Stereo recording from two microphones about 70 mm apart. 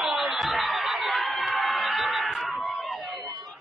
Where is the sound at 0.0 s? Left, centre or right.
Centre.